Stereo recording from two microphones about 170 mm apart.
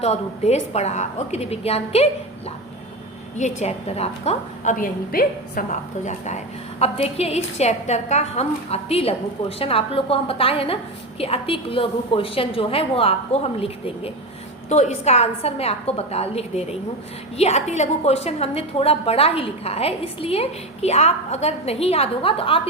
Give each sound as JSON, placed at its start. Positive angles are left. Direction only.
{"t": 0.0, "sound": "a woman's voice", "side_deg": 40}
{"t": 3.3, "sound": "a woman's voice", "side_deg": 40}
{"t": 6.1, "sound": "a woman's voice", "side_deg": 45}